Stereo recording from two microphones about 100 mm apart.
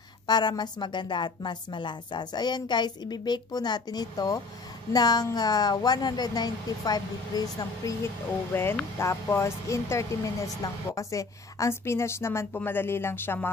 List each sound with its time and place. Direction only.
0.3 s a woman's voice: 45° left (ahead or behind)
8.5 s speech: 20° left (ahead or behind)